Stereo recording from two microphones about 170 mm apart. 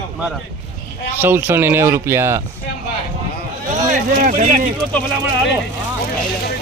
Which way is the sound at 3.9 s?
50° right (ahead or behind).